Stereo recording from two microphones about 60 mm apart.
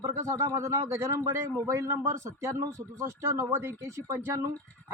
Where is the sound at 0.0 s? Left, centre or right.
Right.